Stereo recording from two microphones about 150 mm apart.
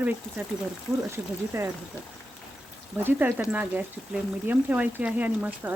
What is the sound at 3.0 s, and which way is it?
Speech, 10° right (ahead or behind).